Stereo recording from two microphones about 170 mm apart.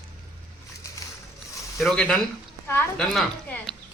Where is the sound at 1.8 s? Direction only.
Centre (ahead or behind).